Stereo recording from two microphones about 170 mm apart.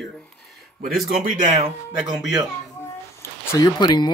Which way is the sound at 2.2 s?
5° right (ahead or behind).